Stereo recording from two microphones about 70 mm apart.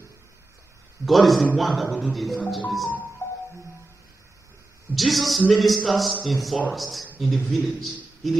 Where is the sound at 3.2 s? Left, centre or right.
Left.